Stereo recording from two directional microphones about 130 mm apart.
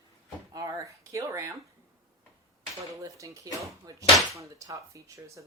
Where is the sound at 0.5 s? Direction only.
25° right (ahead or behind).